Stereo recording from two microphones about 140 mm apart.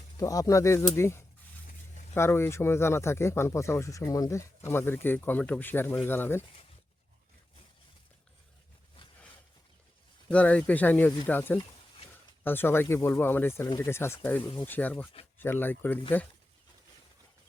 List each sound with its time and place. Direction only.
0.2 s speech: 25° left (ahead or behind)
10.2 s speech: 10° left (ahead or behind)